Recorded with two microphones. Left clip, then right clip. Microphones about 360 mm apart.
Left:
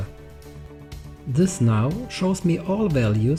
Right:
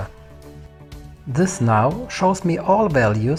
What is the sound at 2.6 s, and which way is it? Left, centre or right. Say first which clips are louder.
Speech: right 10 dB; right.